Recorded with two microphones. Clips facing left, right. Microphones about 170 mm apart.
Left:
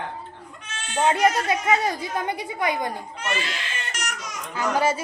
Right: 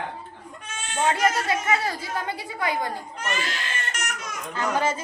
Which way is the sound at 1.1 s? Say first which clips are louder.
Left 2 dB; 20° left (ahead or behind).